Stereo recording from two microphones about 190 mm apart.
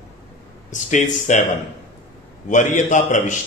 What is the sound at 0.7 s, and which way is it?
Speech, 40° left (ahead or behind).